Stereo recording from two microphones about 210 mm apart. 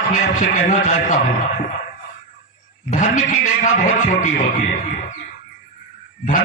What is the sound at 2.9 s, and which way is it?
A man's voice, 35° left (ahead or behind).